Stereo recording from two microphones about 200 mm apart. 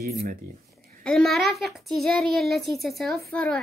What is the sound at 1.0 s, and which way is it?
A child's voice, centre (ahead or behind).